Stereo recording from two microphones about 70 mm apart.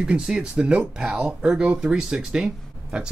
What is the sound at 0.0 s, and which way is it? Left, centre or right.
Speech, centre.